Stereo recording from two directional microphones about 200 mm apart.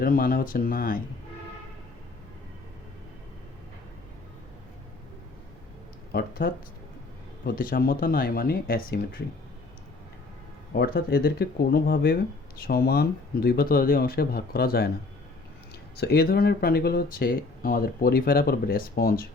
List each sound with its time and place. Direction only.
0.0 s speech: 45° left (ahead or behind)
6.1 s speech: 50° left (ahead or behind)
10.8 s speech: 50° left (ahead or behind)
16.0 s speech: 55° left (ahead or behind)